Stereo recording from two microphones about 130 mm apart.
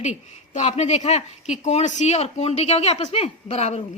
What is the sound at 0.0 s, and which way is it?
A woman's voice, 60° left (ahead or behind).